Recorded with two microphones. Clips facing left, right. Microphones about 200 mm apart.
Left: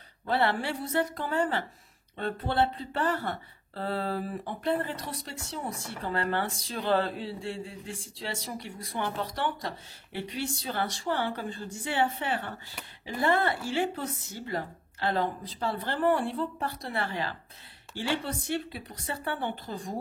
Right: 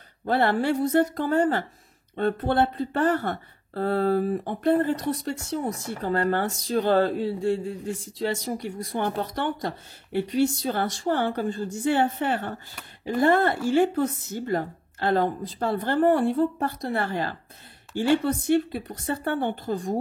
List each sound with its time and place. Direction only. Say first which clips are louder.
0.2 s speech: right 5 dB; 45° right (ahead or behind)